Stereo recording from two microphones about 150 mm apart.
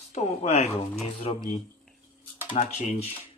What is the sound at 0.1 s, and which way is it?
Speech, 50° left (ahead or behind).